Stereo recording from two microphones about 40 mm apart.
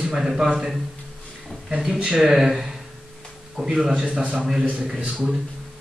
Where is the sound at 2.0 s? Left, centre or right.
Centre.